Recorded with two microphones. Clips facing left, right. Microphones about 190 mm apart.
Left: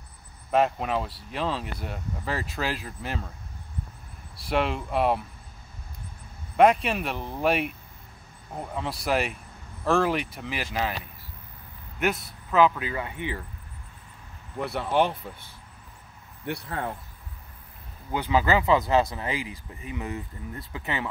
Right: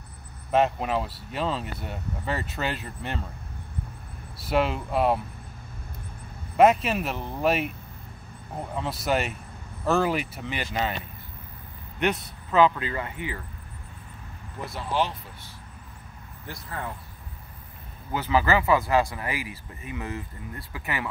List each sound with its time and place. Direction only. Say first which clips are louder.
0.5 s speech: right 1 dB; centre (ahead or behind)
4.5 s speech: right 1 dB; centre (ahead or behind)
6.5 s speech: right 1 dB; centre (ahead or behind)
12.0 s speech: right 1 dB; centre (ahead or behind)
14.6 s speech: left 4 dB; 65° left (ahead or behind)
18.1 s speech: even; 20° left (ahead or behind)